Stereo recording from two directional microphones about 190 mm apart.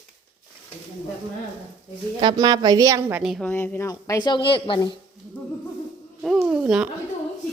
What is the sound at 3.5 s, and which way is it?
Speech, 10° left (ahead or behind).